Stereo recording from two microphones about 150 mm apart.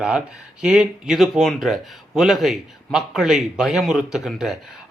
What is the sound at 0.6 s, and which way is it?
A man's voice, 5° right (ahead or behind).